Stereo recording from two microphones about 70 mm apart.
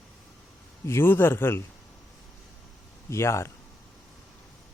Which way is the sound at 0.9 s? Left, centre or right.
Left.